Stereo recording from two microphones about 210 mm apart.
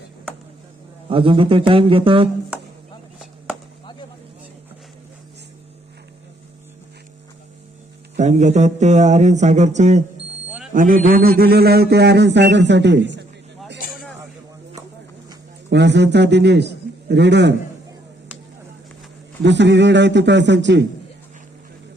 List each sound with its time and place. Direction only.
1.1 s speech: 25° right (ahead or behind)
8.1 s a man's voice: 35° right (ahead or behind); by 13.2 s 55° right (ahead or behind)
13.9 s a sound: 5° left (ahead or behind)
15.7 s a man's voice: 55° right (ahead or behind)
19.4 s a man's voice: 55° right (ahead or behind)